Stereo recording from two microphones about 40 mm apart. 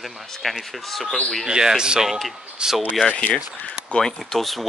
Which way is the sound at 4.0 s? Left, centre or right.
Centre.